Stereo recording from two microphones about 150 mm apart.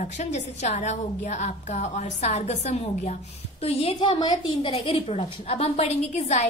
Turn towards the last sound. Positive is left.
turn(degrees=45)  # may be behind; listen again after turning